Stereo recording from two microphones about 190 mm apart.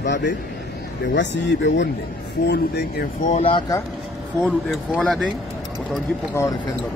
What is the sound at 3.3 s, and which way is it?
Speech, 30° left (ahead or behind).